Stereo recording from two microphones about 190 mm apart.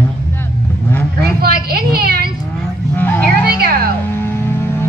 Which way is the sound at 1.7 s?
55° right (ahead or behind).